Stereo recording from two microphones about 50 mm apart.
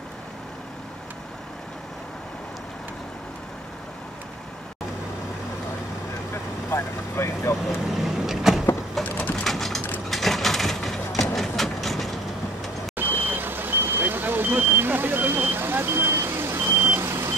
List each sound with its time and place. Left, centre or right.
6.3 s vehicle: left
7.7 s vehicle: centre
9.0 s a sound: centre
11.3 s vehicle: centre
12.9 s vehicle: right